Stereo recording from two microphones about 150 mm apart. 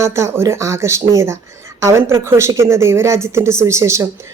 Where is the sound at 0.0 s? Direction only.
20° right (ahead or behind).